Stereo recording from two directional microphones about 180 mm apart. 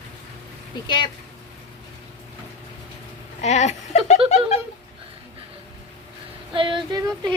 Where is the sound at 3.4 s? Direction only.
40° left (ahead or behind).